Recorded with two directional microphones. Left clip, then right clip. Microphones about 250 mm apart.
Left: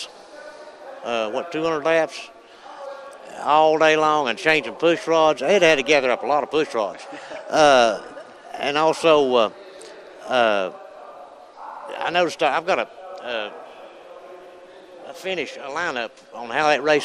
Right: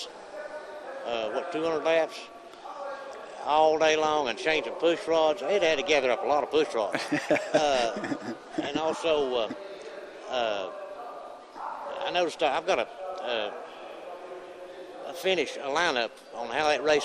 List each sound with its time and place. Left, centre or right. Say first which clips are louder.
1.0 s a man's voice: left 7 dB; left
3.3 s a man's voice: left 7 dB; left
7.1 s speech: right 7 dB; right
7.5 s a man's voice: left 14 dB; left
11.9 s a man's voice: left 8 dB; left
15.0 s a man's voice: even; left